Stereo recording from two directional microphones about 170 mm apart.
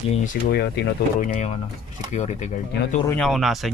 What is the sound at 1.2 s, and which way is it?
Speech, 45° left (ahead or behind).